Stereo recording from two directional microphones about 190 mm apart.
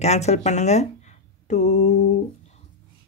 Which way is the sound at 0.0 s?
35° left (ahead or behind).